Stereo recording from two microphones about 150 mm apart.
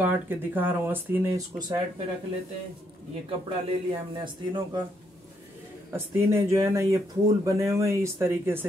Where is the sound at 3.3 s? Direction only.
35° right (ahead or behind).